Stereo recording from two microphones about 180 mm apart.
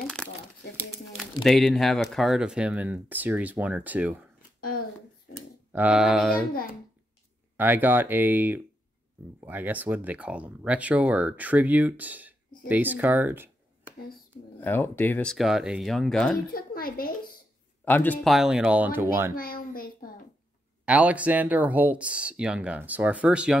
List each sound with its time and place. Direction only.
0.0 s crumpling: 5° left (ahead or behind)
1.1 s speech: centre (ahead or behind)
5.7 s speech: 10° right (ahead or behind)
7.5 s speech: 10° right (ahead or behind)
14.6 s speech: 10° left (ahead or behind)
15.3 s speech: centre (ahead or behind)
16.5 s a child's voice: 55° left (ahead or behind)
17.8 s speech: 10° left (ahead or behind)
18.3 s speech: centre (ahead or behind)
19.3 s a sound: 55° left (ahead or behind)
20.8 s speech: 5° right (ahead or behind)